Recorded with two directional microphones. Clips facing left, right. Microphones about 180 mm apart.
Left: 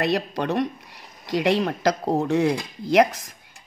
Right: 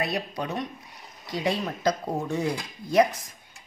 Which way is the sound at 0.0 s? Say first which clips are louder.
Left 6 dB; 80° left.